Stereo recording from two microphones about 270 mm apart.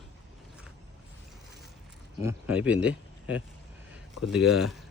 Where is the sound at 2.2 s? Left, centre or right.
Centre.